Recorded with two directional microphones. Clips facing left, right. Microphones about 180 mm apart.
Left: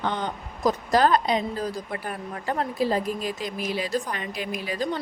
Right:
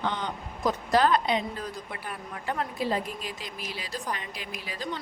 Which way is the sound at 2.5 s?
40° left (ahead or behind).